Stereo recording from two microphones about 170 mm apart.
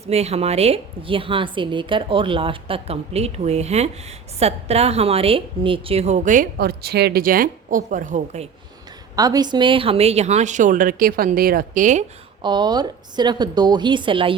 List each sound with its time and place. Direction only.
0.0 s a woman's voice: 40° right (ahead or behind)
9.1 s a woman's voice: 20° right (ahead or behind); by 12.0 s 50° right (ahead or behind)
12.4 s a woman's voice: 25° right (ahead or behind)